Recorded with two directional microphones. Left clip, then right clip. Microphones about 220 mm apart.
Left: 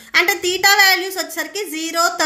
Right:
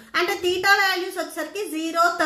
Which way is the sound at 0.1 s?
30° left (ahead or behind).